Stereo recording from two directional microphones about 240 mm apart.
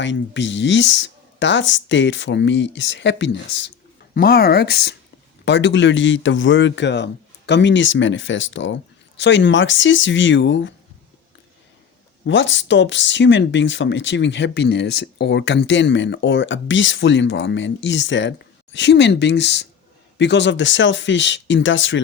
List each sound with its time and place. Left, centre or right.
0.0 s speech: left
12.2 s speech: left